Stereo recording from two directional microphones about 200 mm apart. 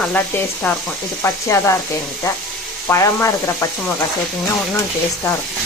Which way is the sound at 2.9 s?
15° left (ahead or behind).